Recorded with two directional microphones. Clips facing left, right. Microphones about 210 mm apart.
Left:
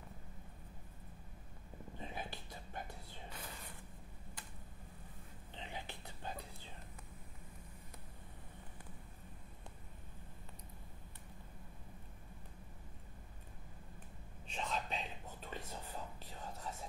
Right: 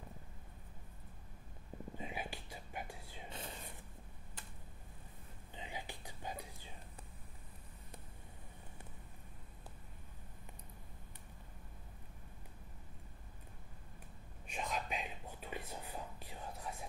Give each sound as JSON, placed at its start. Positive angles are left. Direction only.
{"t": 2.0, "sound": "whispering", "side_deg": -10}
{"t": 3.3, "sound": "whispering", "side_deg": -25}
{"t": 5.5, "sound": "whispering", "side_deg": -10}
{"t": 14.5, "sound": "whispering", "side_deg": -15}